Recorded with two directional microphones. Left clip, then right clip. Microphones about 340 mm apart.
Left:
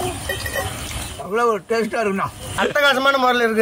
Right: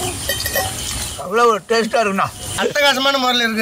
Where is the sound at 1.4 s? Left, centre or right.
Centre.